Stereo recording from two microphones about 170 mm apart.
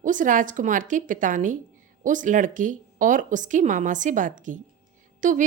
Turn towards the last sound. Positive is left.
turn(degrees=-50)  # may be behind; listen again after turning